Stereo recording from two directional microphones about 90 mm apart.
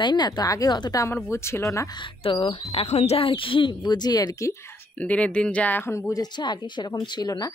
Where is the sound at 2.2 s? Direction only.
90° left.